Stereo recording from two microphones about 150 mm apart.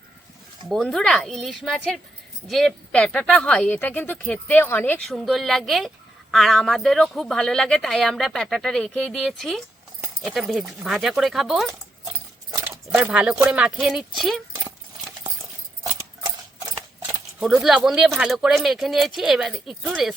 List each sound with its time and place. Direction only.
0.7 s speech: centre (ahead or behind)
5.0 s speech: centre (ahead or behind)
12.5 s speech: 15° right (ahead or behind); by 14.4 s centre (ahead or behind)
15.8 s a sound: 25° right (ahead or behind)
17.0 s speech: centre (ahead or behind)